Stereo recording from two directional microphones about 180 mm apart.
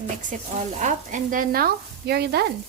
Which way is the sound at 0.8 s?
45° right (ahead or behind).